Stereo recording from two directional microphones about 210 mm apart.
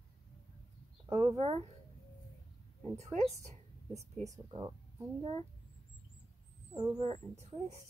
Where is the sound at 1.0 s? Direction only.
15° right (ahead or behind).